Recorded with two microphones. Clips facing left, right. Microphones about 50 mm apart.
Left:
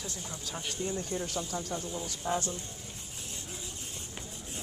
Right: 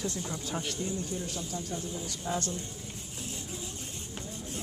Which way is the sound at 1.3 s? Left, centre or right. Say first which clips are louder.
Left 1 dB; left.